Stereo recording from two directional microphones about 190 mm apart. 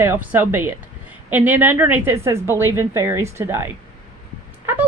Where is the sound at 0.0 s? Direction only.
10° right (ahead or behind).